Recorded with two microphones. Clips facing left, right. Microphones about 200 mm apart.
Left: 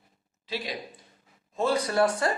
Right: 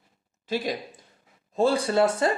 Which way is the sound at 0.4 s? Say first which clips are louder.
Right 6 dB; 45° right (ahead or behind).